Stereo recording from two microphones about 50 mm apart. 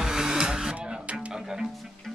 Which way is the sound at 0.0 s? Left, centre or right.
Centre.